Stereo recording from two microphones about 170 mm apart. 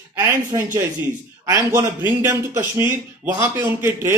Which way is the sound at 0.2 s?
15° right (ahead or behind).